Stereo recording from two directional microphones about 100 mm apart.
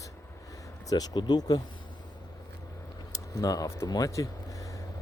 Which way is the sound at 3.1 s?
35° left (ahead or behind).